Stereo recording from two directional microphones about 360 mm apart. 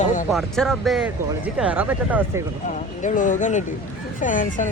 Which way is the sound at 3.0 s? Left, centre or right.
Left.